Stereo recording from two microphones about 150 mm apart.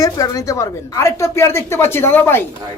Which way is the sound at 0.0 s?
25° left (ahead or behind).